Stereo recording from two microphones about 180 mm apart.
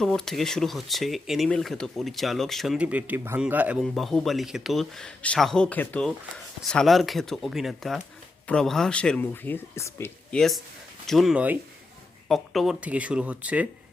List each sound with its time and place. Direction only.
0.0 s speech: centre (ahead or behind)
10.3 s speech: centre (ahead or behind)